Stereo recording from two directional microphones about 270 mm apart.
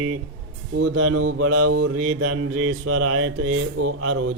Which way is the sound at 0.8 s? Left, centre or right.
Right.